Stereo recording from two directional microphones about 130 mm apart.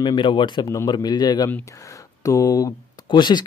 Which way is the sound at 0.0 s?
40° left (ahead or behind).